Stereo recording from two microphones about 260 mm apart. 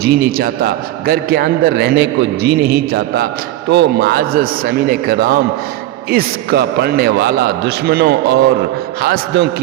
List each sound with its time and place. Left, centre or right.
0.0 s a man's voice: right